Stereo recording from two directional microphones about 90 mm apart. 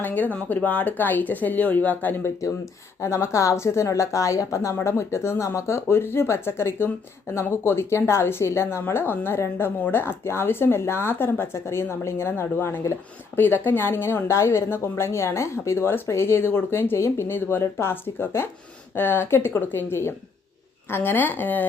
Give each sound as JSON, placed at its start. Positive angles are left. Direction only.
{"t": 0.0, "sound": "speech", "side_deg": 20}
{"t": 3.0, "sound": "speech", "side_deg": 30}